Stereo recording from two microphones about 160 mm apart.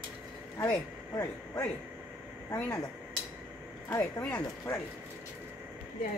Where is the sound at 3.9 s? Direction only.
10° left (ahead or behind).